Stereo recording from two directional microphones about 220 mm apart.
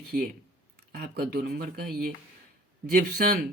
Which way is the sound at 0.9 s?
45° right (ahead or behind).